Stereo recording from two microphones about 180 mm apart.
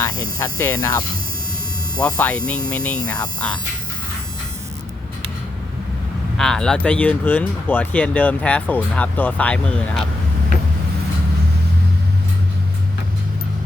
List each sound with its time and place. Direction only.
0.0 s speech: 15° left (ahead or behind)
6.3 s speech: 5° left (ahead or behind)